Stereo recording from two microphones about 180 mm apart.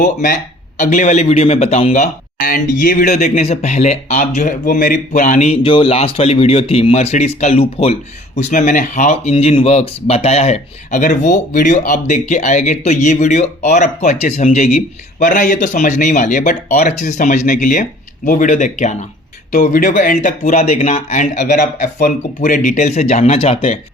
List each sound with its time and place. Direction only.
0.0 s a man's voice: 45° left (ahead or behind)
8.4 s a man's voice: 45° left (ahead or behind)
15.2 s speech: 45° left (ahead or behind)
19.5 s a man's voice: 50° left (ahead or behind); by 23.8 s 35° left (ahead or behind)